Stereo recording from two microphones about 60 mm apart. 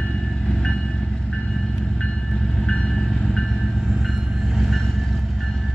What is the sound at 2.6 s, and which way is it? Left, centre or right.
Train, centre.